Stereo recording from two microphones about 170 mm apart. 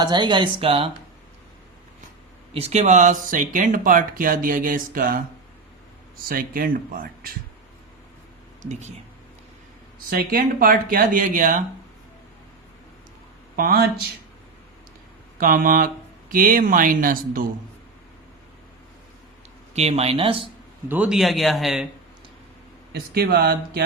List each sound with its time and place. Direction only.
0.0 s speech: 25° right (ahead or behind)
2.5 s speech: 35° right (ahead or behind); by 5.2 s 55° right (ahead or behind)
6.2 s speech: 55° right (ahead or behind)
10.1 s speech: 60° right (ahead or behind)
13.6 s speech: 65° right (ahead or behind)
15.4 s speech: 55° right (ahead or behind)
19.7 s speech: 40° right (ahead or behind)
20.8 s a man's voice: 10° right (ahead or behind)
22.9 s speech: 70° right (ahead or behind)